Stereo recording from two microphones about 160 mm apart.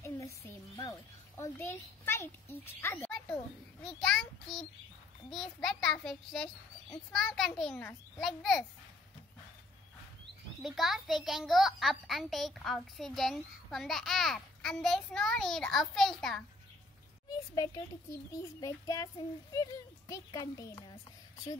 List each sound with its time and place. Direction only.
0.7 s a child's voice: 20° left (ahead or behind)
3.1 s a sound: 5° left (ahead or behind)
3.8 s a child's voice: 5° left (ahead or behind)
10.6 s a child's voice: centre (ahead or behind)
17.3 s speech: 20° left (ahead or behind)